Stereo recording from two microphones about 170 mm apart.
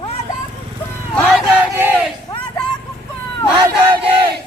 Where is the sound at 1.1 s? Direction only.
5° left (ahead or behind).